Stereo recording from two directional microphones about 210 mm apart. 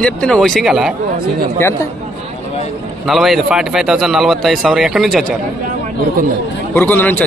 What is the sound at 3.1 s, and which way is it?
A man's voice, centre (ahead or behind).